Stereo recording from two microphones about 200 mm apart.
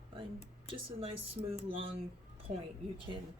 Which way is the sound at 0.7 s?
25° right (ahead or behind).